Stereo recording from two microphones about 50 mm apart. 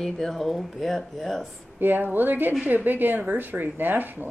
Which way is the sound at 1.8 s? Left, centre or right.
Right.